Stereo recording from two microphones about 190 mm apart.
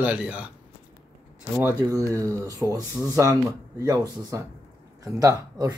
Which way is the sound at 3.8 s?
20° right (ahead or behind).